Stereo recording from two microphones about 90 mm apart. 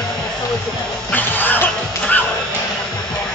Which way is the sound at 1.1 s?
20° left (ahead or behind).